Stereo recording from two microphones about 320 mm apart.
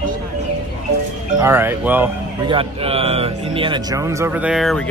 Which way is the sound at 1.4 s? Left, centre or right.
Centre.